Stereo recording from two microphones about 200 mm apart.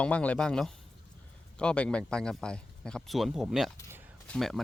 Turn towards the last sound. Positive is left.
turn(degrees=5)  # may be behind; listen again after turning